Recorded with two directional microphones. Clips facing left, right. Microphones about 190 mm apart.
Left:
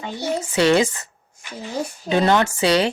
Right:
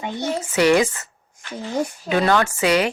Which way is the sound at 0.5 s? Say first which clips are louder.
Right 1 dB; 25° left (ahead or behind).